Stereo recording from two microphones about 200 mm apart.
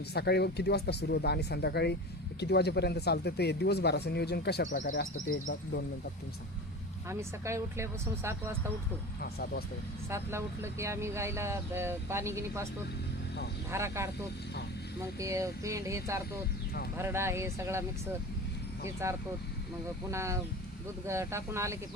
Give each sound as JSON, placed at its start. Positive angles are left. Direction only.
{"t": 0.1, "sound": "speech", "side_deg": 55}
{"t": 4.9, "sound": "speech", "side_deg": 60}
{"t": 7.1, "sound": "speech", "side_deg": -15}
{"t": 9.2, "sound": "speech", "side_deg": 50}
{"t": 10.1, "sound": "speech", "side_deg": -15}
{"t": 13.7, "sound": "speech", "side_deg": -15}
{"t": 15.2, "sound": "speech", "side_deg": -15}
{"t": 19.0, "sound": "speech", "side_deg": -15}